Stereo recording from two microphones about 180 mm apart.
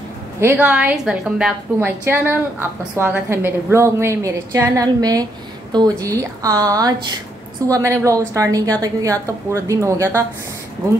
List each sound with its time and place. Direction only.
0.4 s a woman's voice: 10° right (ahead or behind)